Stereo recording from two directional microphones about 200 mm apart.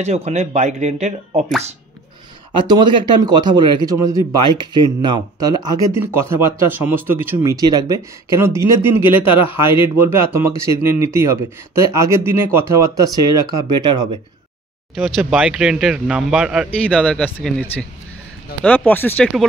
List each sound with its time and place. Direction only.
0.0 s speech: 35° right (ahead or behind)
2.6 s a man's voice: 20° right (ahead or behind)
9.3 s a man's voice: 25° left (ahead or behind)
9.9 s speech: 10° right (ahead or behind)
15.0 s speech: centre (ahead or behind)